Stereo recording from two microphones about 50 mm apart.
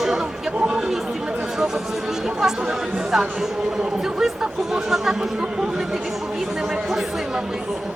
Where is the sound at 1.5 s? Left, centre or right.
Centre.